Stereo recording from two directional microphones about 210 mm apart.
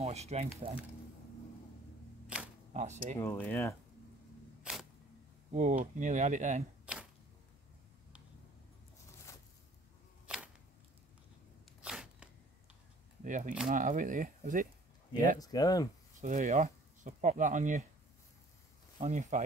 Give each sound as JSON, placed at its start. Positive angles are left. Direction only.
{"t": 0.0, "sound": "speech", "side_deg": -30}
{"t": 2.2, "sound": "camera", "side_deg": -5}
{"t": 2.7, "sound": "speech", "side_deg": -35}
{"t": 3.2, "sound": "speech", "side_deg": 10}
{"t": 5.5, "sound": "speech", "side_deg": -35}
{"t": 10.2, "sound": "a sound", "side_deg": -5}
{"t": 11.8, "sound": "a sound", "side_deg": -5}
{"t": 13.2, "sound": "speech", "side_deg": -35}
{"t": 15.3, "sound": "speech", "side_deg": 15}
{"t": 16.2, "sound": "speech", "side_deg": -35}
{"t": 18.9, "sound": "speech", "side_deg": -35}